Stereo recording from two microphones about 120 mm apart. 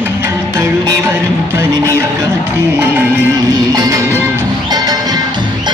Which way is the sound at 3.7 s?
30° right (ahead or behind).